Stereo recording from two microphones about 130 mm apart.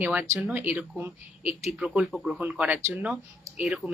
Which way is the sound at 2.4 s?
10° right (ahead or behind).